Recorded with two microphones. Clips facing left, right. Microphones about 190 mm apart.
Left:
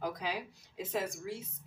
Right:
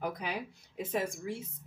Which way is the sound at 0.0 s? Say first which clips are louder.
Right 1 dB; 55° right (ahead or behind).